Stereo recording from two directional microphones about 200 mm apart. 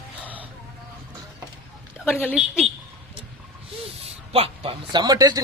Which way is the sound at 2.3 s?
Centre (ahead or behind).